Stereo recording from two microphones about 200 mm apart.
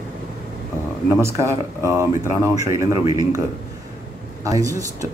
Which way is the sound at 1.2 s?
15° right (ahead or behind).